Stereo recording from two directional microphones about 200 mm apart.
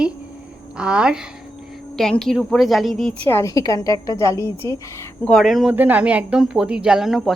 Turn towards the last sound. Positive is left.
turn(degrees=0)  # may be behind; listen again after turning